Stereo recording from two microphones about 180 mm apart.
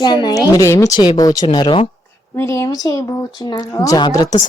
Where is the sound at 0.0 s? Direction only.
25° left (ahead or behind).